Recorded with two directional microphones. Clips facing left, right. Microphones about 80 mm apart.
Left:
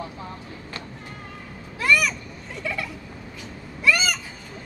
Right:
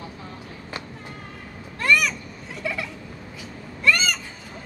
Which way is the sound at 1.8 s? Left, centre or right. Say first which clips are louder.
Even; centre.